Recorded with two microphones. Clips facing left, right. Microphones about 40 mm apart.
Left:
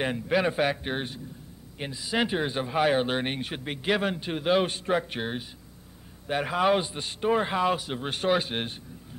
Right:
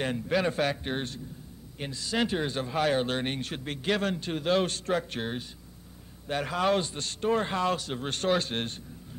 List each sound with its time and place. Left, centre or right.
0.0 s speech: centre